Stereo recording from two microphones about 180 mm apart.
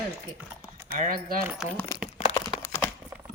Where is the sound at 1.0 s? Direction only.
55° right (ahead or behind).